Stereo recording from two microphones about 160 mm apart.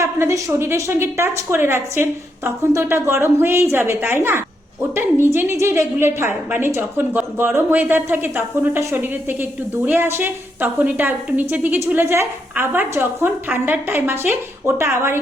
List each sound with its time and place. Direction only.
0.0 s a woman's voice: 20° right (ahead or behind)